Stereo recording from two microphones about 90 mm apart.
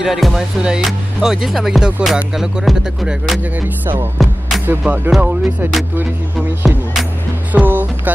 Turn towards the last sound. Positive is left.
turn(degrees=-20)  # may be behind; listen again after turning